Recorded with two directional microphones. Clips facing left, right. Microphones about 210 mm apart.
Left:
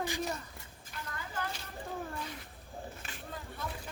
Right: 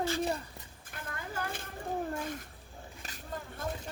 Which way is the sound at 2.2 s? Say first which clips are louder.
Right 5 dB; 50° right (ahead or behind).